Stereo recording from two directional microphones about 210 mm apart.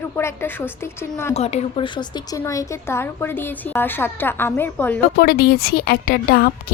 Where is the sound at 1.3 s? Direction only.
30° left (ahead or behind); by 5.0 s 10° left (ahead or behind).